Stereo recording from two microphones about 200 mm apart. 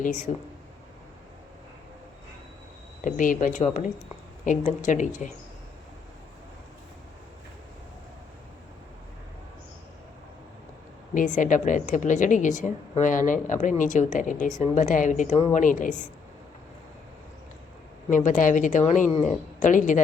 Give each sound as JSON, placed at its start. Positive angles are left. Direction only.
{"t": 0.0, "sound": "a woman's voice", "side_deg": 40}
{"t": 3.0, "sound": "a woman's voice", "side_deg": 40}
{"t": 11.1, "sound": "a woman's voice", "side_deg": 40}
{"t": 18.1, "sound": "a woman's voice", "side_deg": 40}